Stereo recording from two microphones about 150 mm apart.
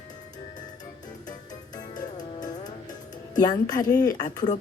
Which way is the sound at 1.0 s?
25° left (ahead or behind).